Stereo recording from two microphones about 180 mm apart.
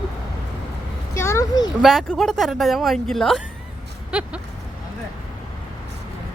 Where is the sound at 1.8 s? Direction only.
Centre (ahead or behind).